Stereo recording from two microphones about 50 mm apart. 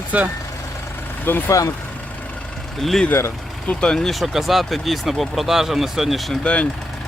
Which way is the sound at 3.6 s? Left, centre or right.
Centre.